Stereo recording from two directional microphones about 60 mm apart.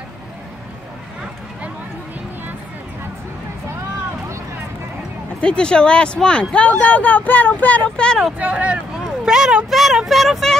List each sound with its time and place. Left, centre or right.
5.4 s speech: centre
6.8 s speech: left
7.9 s speech: centre
8.4 s speech: right
9.0 s speech: centre